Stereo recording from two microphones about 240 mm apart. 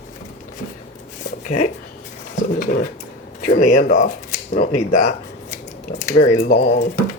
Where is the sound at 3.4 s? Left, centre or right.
Left.